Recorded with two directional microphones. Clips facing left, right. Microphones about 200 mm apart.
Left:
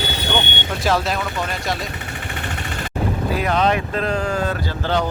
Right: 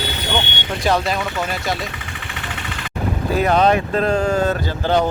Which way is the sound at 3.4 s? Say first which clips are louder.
Right 4 dB; 40° right (ahead or behind).